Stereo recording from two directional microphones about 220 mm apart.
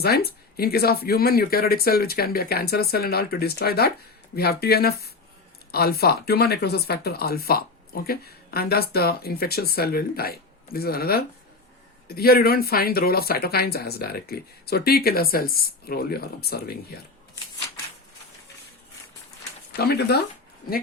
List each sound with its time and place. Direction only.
0.0 s speech: 45° left (ahead or behind)
19.7 s speech: 45° left (ahead or behind)